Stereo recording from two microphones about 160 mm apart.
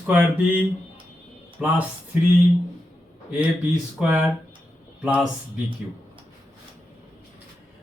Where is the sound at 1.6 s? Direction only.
5° right (ahead or behind).